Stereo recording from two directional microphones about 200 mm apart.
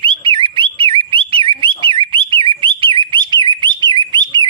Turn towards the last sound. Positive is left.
turn(degrees=-20)  # may be behind; listen again after turning